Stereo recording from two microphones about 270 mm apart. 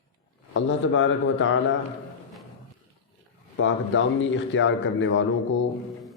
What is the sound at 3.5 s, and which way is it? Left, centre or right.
A man's voice, left.